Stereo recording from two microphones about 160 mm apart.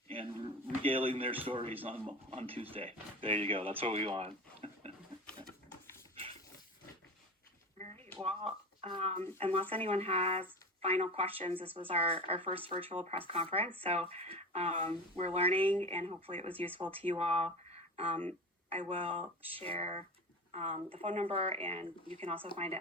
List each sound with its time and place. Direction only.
0.1 s a sound: 35° right (ahead or behind)
1.5 s speech: 35° right (ahead or behind)
8.2 s speech: 40° right (ahead or behind)